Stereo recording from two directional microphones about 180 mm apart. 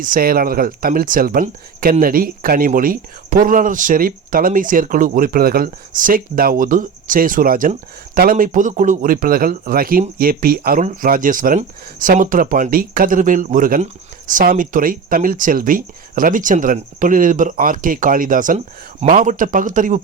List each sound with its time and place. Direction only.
0.0 s speech: 50° right (ahead or behind)